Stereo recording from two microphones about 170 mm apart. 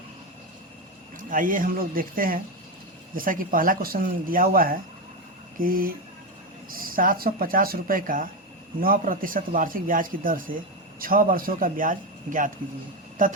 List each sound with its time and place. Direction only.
1.3 s a man's voice: 55° right (ahead or behind)